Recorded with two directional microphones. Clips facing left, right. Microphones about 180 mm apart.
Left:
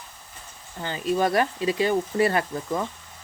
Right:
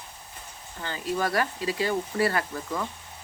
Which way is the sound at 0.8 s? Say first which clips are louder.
Left 5 dB; 20° left (ahead or behind).